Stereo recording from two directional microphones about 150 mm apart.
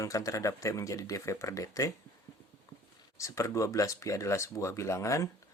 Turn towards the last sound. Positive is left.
turn(degrees=20)  # may be behind; listen again after turning